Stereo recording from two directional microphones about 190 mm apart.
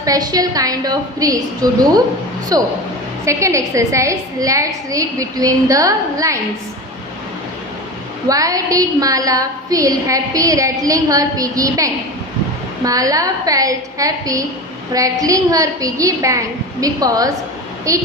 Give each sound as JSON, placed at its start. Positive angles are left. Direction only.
{"t": 0.0, "sound": "a woman's voice", "side_deg": -20}
{"t": 8.3, "sound": "a woman's voice", "side_deg": -20}